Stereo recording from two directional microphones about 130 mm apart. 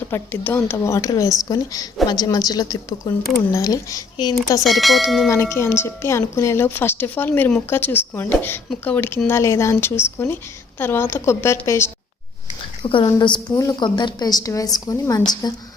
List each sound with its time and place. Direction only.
0.1 s a woman's voice: 15° left (ahead or behind)
4.6 s bell: centre (ahead or behind)
5.3 s a woman's voice: 20° left (ahead or behind)
12.8 s a woman's voice: 40° left (ahead or behind)